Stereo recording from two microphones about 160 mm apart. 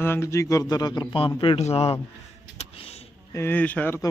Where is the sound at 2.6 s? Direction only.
40° left (ahead or behind).